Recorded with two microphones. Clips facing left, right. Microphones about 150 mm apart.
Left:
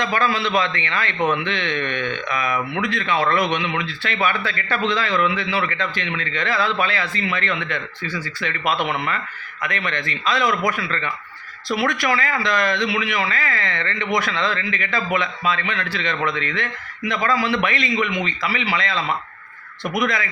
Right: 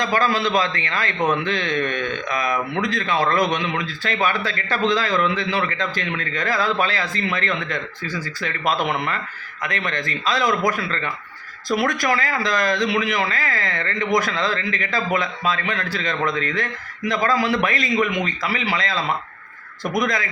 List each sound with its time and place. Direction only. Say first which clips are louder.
0.0 s speech: right 1 dB; 40° right (ahead or behind)